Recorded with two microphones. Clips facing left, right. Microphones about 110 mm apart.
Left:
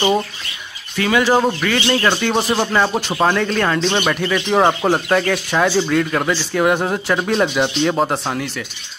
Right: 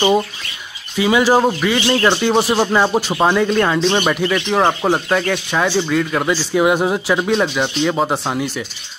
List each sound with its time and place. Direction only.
0.9 s speech: 15° right (ahead or behind)